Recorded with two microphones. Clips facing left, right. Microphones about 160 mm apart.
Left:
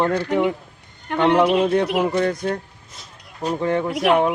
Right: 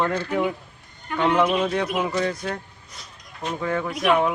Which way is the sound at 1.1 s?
70° left (ahead or behind).